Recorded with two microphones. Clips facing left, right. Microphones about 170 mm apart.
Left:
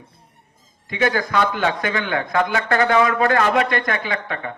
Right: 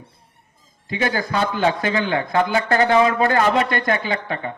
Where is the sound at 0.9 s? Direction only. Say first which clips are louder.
Left 2 dB; 30° right (ahead or behind).